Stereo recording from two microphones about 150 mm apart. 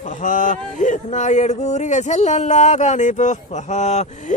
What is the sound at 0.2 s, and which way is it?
Speech, 55° left (ahead or behind).